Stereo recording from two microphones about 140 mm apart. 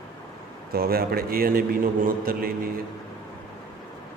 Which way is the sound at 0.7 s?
90° right.